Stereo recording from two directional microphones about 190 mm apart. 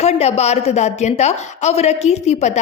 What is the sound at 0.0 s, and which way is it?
A woman's voice, 35° left (ahead or behind).